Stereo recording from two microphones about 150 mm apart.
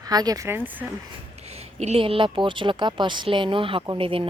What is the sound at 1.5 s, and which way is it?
A woman's voice, 45° right (ahead or behind).